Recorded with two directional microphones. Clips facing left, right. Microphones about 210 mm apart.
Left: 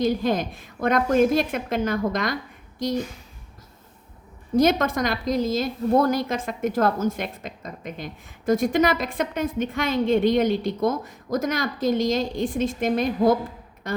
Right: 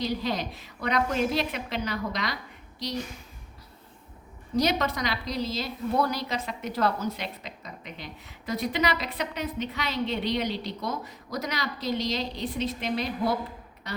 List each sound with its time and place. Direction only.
0.0 s a woman's voice: 50° left (ahead or behind)
4.5 s a woman's voice: 50° left (ahead or behind)
13.8 s a sound: 50° left (ahead or behind)